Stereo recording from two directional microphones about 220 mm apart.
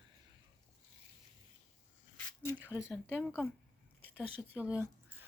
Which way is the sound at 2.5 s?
5° right (ahead or behind).